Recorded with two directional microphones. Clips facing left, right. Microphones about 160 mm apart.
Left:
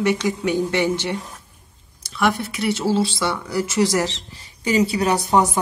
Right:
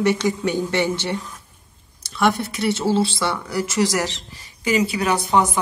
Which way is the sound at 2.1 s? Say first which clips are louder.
Right 1 dB; 5° left (ahead or behind).